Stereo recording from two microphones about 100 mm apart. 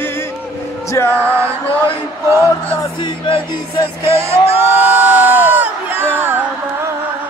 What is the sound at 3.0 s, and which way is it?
Speech, 60° left (ahead or behind).